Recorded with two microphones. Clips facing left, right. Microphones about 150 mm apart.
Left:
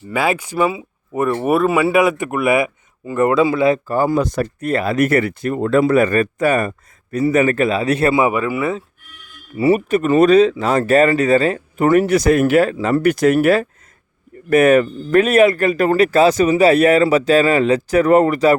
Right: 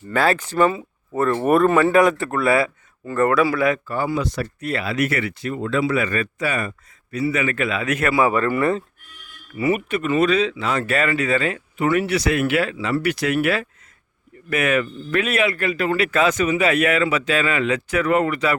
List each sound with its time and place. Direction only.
0.1 s speech: 10° left (ahead or behind)
3.8 s speech: 45° left (ahead or behind)
8.2 s speech: 10° left (ahead or behind)
9.6 s speech: 30° left (ahead or behind)